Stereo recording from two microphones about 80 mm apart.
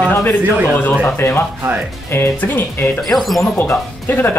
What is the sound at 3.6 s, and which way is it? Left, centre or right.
Speech, left.